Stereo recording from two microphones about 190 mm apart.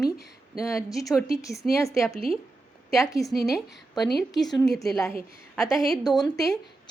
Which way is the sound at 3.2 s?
15° left (ahead or behind).